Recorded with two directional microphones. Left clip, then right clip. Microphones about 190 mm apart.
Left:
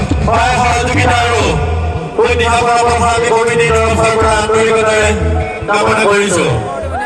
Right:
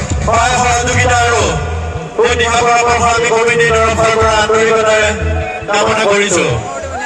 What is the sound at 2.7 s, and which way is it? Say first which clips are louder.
Speech: right 1 dB; 10° right (ahead or behind).